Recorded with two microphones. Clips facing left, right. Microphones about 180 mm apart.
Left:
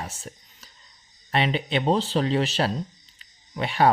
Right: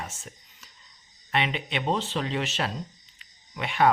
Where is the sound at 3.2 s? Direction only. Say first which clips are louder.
Left 5 dB; 35° left (ahead or behind).